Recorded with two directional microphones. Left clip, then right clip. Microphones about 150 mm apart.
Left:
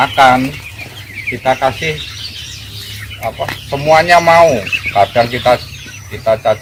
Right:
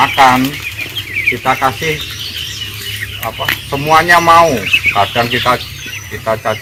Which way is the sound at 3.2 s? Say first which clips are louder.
Right 1 dB; 30° left (ahead or behind).